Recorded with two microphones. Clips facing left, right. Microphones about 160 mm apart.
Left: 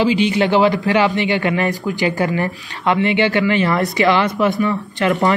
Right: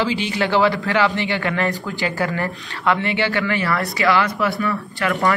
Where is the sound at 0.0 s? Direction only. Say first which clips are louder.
Left 6 dB; 20° left (ahead or behind).